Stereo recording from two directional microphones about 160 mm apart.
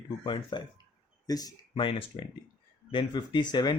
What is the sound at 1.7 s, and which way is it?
Speech, 35° left (ahead or behind).